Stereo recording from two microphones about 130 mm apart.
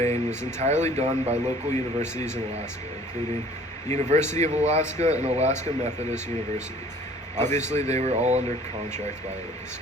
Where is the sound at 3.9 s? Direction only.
65° right (ahead or behind).